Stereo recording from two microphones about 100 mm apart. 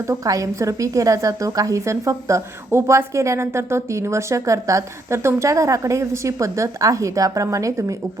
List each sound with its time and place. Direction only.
0.1 s a woman's voice: 35° right (ahead or behind)